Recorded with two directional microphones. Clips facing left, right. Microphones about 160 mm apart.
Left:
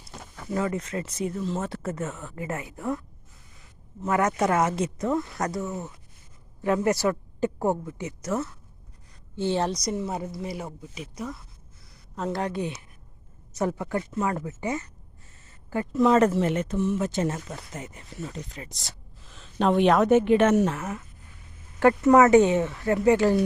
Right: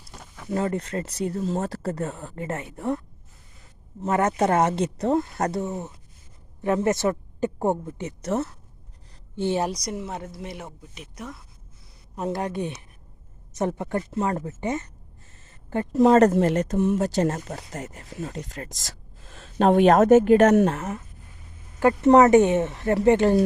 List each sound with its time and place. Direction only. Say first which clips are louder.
0.1 s a sound: left 2 dB; centre (ahead or behind)
0.5 s speech: right 2 dB; 35° right (ahead or behind)
4.0 s a man's voice: right 2 dB; 30° right (ahead or behind)
8.3 s speech: right 3 dB; 40° right (ahead or behind)
9.3 s a woman's voice: right 1 dB; 15° right (ahead or behind)
9.8 s speech: left 3 dB; centre (ahead or behind)
12.1 s speech: right 1 dB; 15° right (ahead or behind); by 14.5 s 30° right (ahead or behind)
15.7 s speech: right 3 dB; 35° right (ahead or behind)
22.0 s speech: right 3 dB; 30° right (ahead or behind)
22.3 s speech: right 1 dB; 20° right (ahead or behind)